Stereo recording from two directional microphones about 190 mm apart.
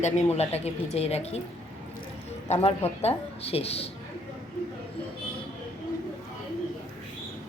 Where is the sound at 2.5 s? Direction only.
35° left (ahead or behind).